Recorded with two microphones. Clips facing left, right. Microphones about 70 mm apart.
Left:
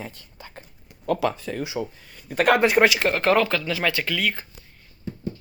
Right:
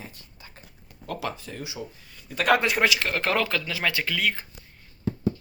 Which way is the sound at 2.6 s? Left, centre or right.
Left.